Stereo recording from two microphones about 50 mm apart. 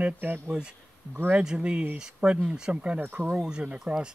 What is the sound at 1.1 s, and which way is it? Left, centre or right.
Speech, right.